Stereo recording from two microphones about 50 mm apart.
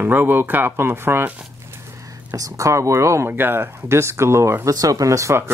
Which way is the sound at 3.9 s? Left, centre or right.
Right.